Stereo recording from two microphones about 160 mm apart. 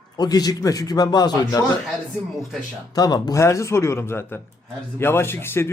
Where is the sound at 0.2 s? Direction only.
25° left (ahead or behind).